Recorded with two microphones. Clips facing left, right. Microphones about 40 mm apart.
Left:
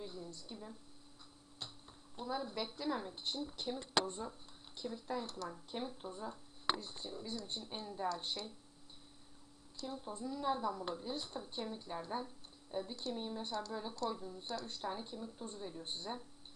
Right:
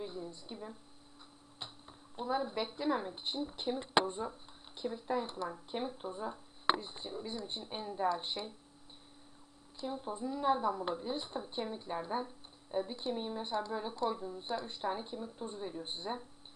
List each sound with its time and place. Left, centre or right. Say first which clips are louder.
0.0 s speech: right 5 dB; right
9.7 s speech: right 5 dB; right